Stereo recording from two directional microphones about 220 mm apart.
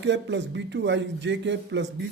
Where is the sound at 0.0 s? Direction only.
55° right (ahead or behind).